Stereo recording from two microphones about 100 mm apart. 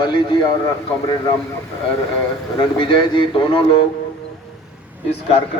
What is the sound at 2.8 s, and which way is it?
Speech, 55° left (ahead or behind).